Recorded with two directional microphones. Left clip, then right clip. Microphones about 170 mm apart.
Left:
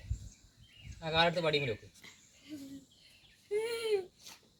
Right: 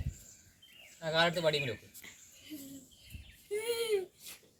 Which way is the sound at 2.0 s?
Centre (ahead or behind).